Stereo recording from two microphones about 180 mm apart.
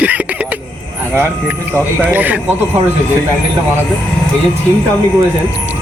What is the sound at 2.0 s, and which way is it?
Speech, 10° right (ahead or behind).